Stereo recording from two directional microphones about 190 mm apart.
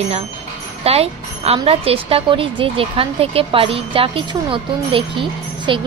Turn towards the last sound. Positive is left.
turn(degrees=-25)  # may be behind; listen again after turning